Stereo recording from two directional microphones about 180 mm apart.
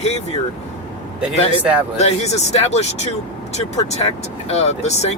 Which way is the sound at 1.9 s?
40° left (ahead or behind).